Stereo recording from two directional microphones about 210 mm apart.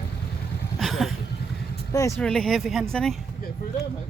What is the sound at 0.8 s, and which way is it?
Vehicle, centre (ahead or behind).